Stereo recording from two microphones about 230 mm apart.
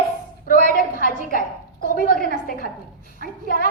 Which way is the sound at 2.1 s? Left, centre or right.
Right.